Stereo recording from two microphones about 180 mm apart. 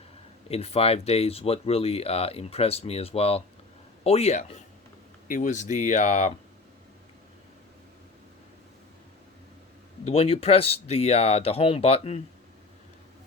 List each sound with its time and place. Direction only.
0.4 s speech: 35° left (ahead or behind)
10.0 s speech: 35° left (ahead or behind)